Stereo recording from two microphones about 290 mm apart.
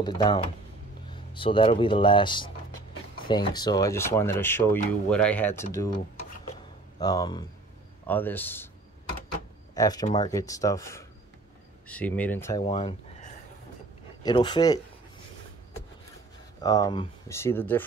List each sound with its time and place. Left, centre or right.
0.0 s speech: centre
7.0 s speech: centre
9.8 s speech: centre
16.6 s speech: centre